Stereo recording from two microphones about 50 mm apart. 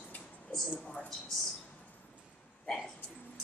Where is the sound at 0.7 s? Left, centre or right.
Left.